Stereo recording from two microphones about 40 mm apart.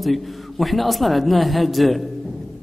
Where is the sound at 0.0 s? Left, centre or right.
Centre.